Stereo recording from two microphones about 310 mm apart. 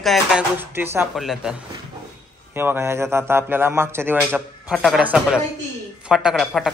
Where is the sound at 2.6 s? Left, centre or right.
Centre.